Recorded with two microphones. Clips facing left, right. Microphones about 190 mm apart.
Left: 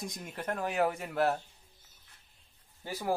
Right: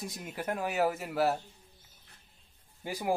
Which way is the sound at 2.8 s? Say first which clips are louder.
Right 2 dB; 15° right (ahead or behind).